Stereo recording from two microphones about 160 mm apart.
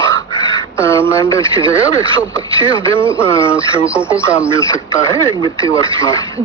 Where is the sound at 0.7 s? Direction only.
15° left (ahead or behind).